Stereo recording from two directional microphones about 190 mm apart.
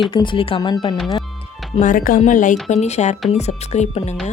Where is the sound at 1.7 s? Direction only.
45° left (ahead or behind).